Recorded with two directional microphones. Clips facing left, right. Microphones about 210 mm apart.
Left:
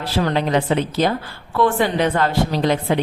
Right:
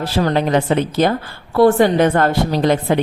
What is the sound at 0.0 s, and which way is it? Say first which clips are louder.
A woman's voice: right 3 dB; 40° right (ahead or behind).